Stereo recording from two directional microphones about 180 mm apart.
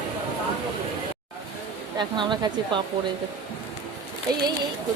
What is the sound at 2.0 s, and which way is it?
Speech, 25° right (ahead or behind).